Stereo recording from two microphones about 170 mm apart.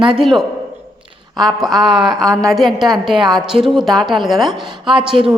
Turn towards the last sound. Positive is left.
turn(degrees=-5)  # may be behind; listen again after turning